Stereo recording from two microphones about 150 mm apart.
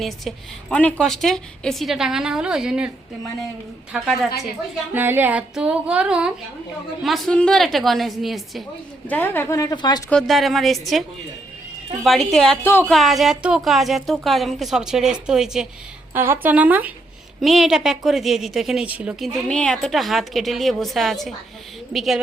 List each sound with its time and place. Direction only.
0.0 s a woman's voice: 5° left (ahead or behind)
3.9 s a woman's voice: centre (ahead or behind)
4.9 s a sound: 15° right (ahead or behind)
7.0 s a woman's voice: centre (ahead or behind)
9.0 s speech: 10° left (ahead or behind); by 10.0 s 30° left (ahead or behind)
10.1 s a woman's voice: centre (ahead or behind)
12.0 s a woman's voice: 5° left (ahead or behind)
12.6 s speech: 15° left (ahead or behind)
12.9 s a woman's voice: centre (ahead or behind)
16.1 s a sound: 15° right (ahead or behind)
17.4 s a woman's voice: centre (ahead or behind)
19.5 s a woman's voice: 5° left (ahead or behind)